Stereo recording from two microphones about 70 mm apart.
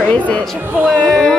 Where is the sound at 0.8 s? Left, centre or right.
Centre.